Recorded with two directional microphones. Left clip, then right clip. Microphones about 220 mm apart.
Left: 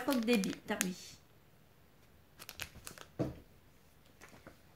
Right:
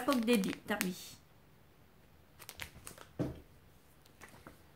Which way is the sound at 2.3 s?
20° left (ahead or behind).